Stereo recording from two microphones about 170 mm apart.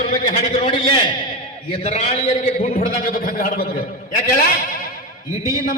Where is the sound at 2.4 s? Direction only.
50° left (ahead or behind).